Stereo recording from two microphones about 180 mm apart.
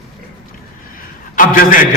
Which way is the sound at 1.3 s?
50° left (ahead or behind).